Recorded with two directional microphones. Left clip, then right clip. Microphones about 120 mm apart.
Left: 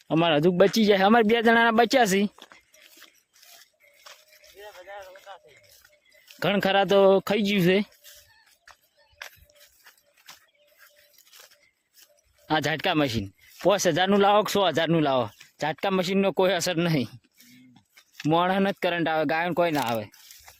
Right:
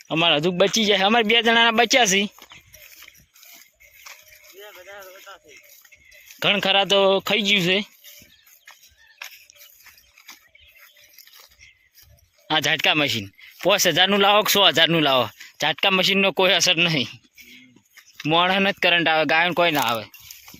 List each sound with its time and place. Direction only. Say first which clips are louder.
0.1 s a man's voice: right 2 dB; 50° left (ahead or behind)
2.3 s a sound: right 4 dB; 15° right (ahead or behind)
4.6 s a sound: right 1 dB; 50° right (ahead or behind)
6.4 s a man's voice: right 4 dB; 45° left (ahead or behind); by 7.9 s 65° left (ahead or behind)
12.5 s speech: right 5 dB; 40° left (ahead or behind)
13.6 s speech: right 4 dB; 25° left (ahead or behind)
16.6 s speech: right 7 dB; 35° left (ahead or behind)
18.2 s speech: right 4 dB; 30° left (ahead or behind); by 19.9 s centre (ahead or behind)